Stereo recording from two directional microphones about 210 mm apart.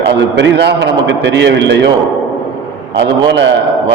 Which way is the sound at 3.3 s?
55° right (ahead or behind).